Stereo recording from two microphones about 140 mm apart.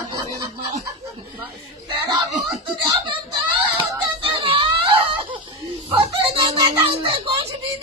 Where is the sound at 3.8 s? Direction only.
40° right (ahead or behind).